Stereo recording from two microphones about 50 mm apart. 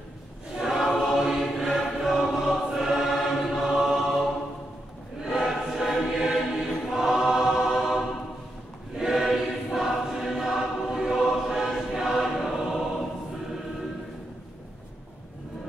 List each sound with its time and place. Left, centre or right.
0.6 s choir: centre
5.4 s choir: centre